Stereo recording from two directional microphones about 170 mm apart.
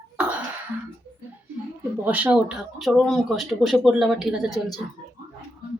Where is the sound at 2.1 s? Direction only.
10° right (ahead or behind).